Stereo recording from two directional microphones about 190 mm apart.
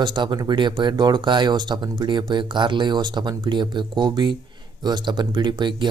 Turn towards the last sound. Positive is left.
turn(degrees=-25)  # may be behind; listen again after turning